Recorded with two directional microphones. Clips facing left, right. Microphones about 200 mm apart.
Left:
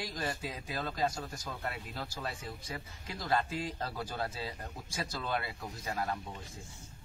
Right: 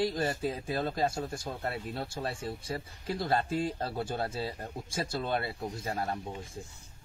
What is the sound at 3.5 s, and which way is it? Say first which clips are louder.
Speech: right 6 dB; 50° right (ahead or behind).